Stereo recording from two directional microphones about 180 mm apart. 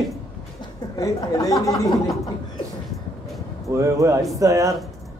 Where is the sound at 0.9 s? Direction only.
20° left (ahead or behind).